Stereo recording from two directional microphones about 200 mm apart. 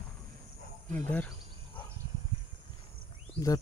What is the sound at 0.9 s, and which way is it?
Speech, 10° left (ahead or behind).